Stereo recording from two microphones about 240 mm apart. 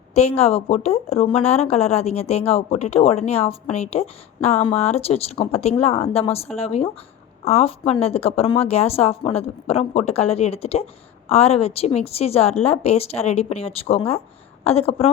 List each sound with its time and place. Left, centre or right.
0.1 s a woman's voice: left